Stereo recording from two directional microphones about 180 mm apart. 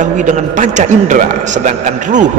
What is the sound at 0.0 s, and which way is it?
A man's voice, 45° right (ahead or behind).